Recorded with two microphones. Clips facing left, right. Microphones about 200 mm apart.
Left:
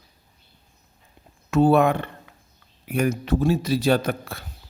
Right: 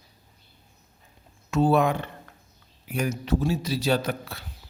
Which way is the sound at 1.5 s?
60° left (ahead or behind).